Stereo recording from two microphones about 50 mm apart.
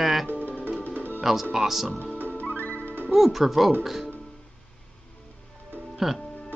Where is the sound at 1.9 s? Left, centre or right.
Left.